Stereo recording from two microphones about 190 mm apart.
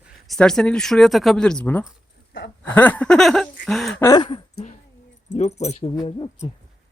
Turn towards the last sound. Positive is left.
turn(degrees=20)  # may be behind; listen again after turning